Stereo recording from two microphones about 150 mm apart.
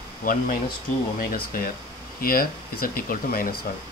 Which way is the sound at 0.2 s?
65° left (ahead or behind).